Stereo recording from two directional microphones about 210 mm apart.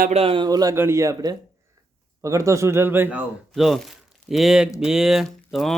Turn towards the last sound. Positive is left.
turn(degrees=0)  # may be behind; listen again after turning